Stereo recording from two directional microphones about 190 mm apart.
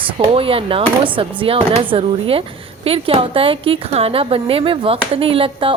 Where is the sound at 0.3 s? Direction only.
30° right (ahead or behind).